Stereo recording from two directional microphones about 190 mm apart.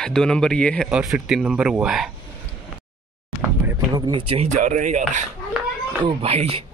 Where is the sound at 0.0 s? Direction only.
5° left (ahead or behind).